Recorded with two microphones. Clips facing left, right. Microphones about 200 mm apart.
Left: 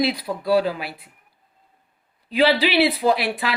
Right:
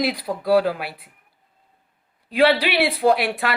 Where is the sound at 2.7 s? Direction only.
55° right (ahead or behind).